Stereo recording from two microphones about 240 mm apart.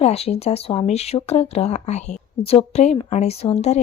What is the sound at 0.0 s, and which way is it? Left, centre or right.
Speech, left.